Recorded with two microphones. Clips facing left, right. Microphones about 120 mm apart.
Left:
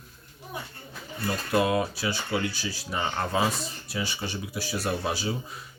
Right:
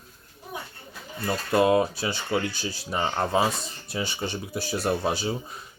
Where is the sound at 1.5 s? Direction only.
30° right (ahead or behind).